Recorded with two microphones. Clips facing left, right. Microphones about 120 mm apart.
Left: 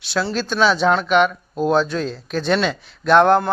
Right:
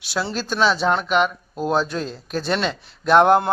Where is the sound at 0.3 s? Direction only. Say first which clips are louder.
Left 2 dB; 5° right (ahead or behind).